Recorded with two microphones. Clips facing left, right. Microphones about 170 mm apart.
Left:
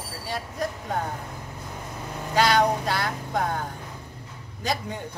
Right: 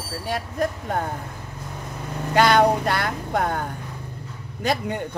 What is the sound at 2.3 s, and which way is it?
Speech, 55° right (ahead or behind).